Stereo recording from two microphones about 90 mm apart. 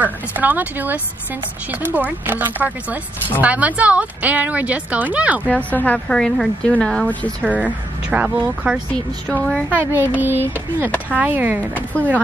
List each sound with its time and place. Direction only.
0.0 s a woman's voice: 20° right (ahead or behind)
5.5 s speech: 15° left (ahead or behind)
6.1 s speech: 5° left (ahead or behind)
7.4 s a woman's voice: 15° right (ahead or behind)
9.3 s speech: 15° left (ahead or behind)
9.7 s speech: 20° right (ahead or behind)